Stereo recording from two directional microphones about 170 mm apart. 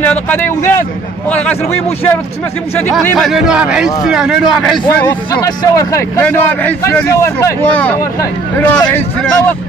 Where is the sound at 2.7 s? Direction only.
5° left (ahead or behind).